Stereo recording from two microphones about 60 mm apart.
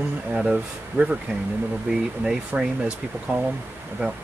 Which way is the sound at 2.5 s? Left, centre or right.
Right.